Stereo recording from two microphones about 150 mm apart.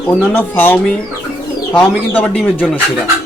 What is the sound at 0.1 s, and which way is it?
Speech, 15° left (ahead or behind).